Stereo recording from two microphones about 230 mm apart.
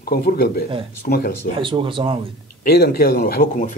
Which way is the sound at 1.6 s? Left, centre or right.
Right.